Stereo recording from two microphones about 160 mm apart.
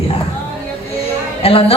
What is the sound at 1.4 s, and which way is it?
Speech, 35° left (ahead or behind).